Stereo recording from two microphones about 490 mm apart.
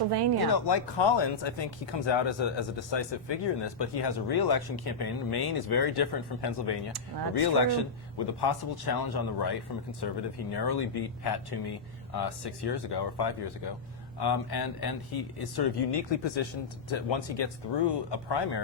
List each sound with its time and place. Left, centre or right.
0.5 s speech: left